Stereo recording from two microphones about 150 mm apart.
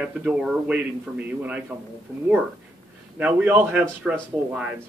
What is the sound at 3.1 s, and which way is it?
Speech, 10° right (ahead or behind).